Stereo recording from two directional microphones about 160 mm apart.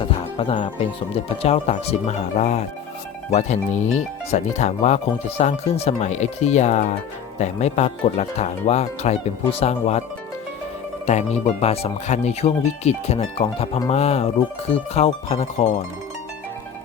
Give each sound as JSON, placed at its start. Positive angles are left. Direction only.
{"t": 0.0, "sound": "music", "side_deg": 35}
{"t": 0.6, "sound": "speech", "side_deg": 35}
{"t": 4.3, "sound": "speech", "side_deg": 45}
{"t": 11.0, "sound": "speech", "side_deg": 45}